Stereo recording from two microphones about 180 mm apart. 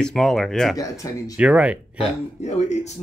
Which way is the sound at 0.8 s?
20° left (ahead or behind).